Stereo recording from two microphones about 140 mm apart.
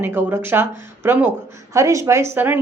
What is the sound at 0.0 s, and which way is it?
A woman's voice, 15° right (ahead or behind).